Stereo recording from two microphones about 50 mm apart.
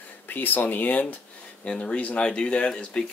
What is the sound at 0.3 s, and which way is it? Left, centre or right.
Speech, left.